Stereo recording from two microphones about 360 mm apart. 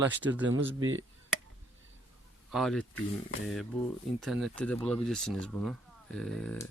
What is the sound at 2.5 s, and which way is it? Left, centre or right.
Speech, centre.